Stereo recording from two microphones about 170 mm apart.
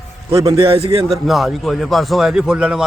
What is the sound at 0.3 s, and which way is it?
Speech, 25° right (ahead or behind).